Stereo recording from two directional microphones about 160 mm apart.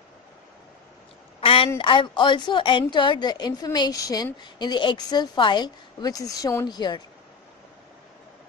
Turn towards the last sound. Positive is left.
turn(degrees=25)  # may be behind; listen again after turning